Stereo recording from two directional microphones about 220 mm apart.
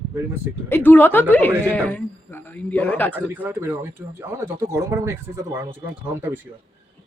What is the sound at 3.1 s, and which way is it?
Speech, 10° right (ahead or behind).